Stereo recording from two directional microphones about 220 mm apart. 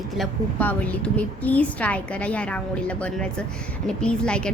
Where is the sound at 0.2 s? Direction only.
5° left (ahead or behind).